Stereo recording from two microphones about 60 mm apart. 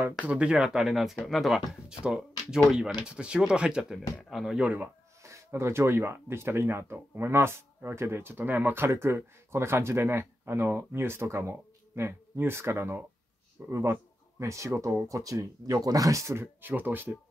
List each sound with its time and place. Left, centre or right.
0.3 s speech: centre
1.9 s speech: centre
5.2 s speech: right
16.6 s speech: right